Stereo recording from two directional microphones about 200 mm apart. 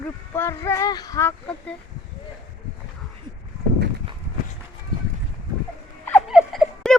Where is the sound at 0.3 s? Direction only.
15° left (ahead or behind).